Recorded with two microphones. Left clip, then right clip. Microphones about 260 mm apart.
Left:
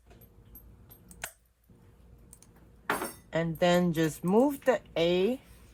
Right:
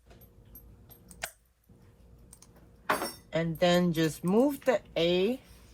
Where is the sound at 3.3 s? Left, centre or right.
Left.